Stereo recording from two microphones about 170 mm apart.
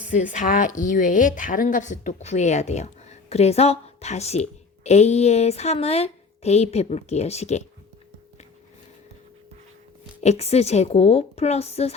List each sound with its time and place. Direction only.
0.1 s a woman's voice: 45° left (ahead or behind)
10.2 s a woman's voice: 40° left (ahead or behind)